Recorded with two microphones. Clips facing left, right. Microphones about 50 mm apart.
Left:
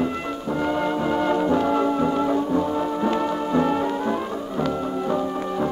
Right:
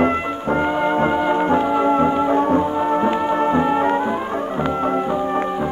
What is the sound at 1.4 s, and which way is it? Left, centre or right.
Brass instrument, right.